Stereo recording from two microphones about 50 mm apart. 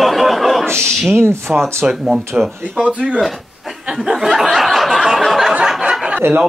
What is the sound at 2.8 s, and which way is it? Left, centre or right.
Speech, right.